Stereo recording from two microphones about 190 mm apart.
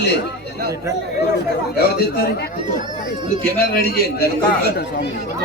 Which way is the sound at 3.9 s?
55° left (ahead or behind).